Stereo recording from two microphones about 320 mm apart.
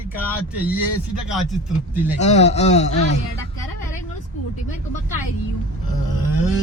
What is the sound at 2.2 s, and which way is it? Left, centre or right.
Speech, left.